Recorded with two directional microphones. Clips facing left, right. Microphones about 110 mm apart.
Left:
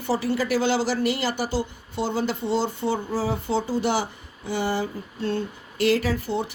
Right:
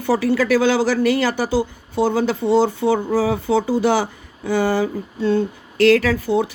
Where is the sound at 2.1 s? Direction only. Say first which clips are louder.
Right 6 dB; 90° right.